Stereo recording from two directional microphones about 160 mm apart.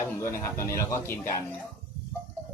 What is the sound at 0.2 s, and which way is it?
Speech, 15° left (ahead or behind).